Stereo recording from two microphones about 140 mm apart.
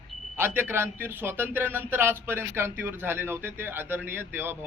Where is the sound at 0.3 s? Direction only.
15° right (ahead or behind).